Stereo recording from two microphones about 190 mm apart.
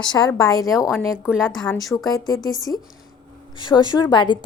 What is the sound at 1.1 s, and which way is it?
Speech, 5° right (ahead or behind).